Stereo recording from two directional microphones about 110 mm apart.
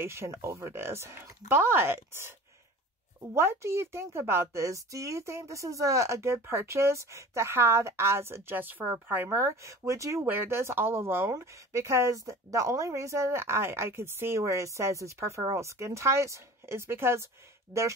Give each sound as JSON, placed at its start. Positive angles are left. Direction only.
{"t": 0.0, "sound": "a woman's voice", "side_deg": -25}
{"t": 3.3, "sound": "a woman's voice", "side_deg": -25}